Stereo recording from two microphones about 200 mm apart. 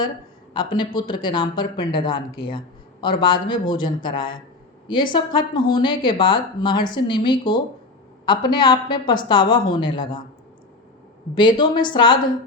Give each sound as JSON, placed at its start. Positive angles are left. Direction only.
{"t": 0.5, "sound": "speech", "side_deg": 25}
{"t": 11.3, "sound": "speech", "side_deg": 25}